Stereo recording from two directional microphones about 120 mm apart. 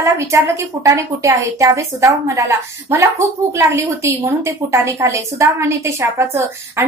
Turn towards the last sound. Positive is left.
turn(degrees=-25)  # may be behind; listen again after turning